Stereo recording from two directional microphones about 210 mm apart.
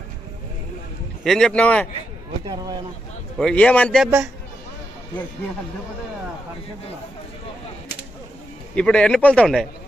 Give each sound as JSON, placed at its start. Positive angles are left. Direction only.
{"t": 1.2, "sound": "a man's voice", "side_deg": 0}
{"t": 2.4, "sound": "speech", "side_deg": -20}
{"t": 3.3, "sound": "a man's voice", "side_deg": 5}
{"t": 8.7, "sound": "a man's voice", "side_deg": 5}